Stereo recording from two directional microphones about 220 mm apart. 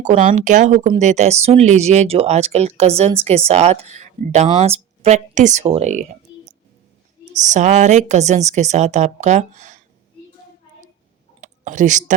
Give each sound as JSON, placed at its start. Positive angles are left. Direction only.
{"t": 0.1, "sound": "a woman's voice", "side_deg": -35}
{"t": 7.5, "sound": "a woman's voice", "side_deg": -35}
{"t": 11.3, "sound": "a sound", "side_deg": -35}